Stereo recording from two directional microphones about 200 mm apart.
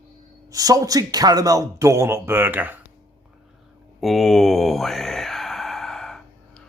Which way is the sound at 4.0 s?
Centre (ahead or behind).